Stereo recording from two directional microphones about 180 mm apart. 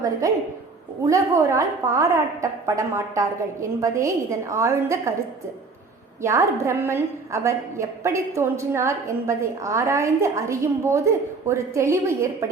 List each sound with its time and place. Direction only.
0.0 s a woman's voice: 20° right (ahead or behind)
6.2 s a woman's voice: 15° right (ahead or behind)